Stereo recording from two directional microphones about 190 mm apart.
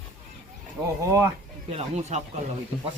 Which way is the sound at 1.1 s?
15° right (ahead or behind).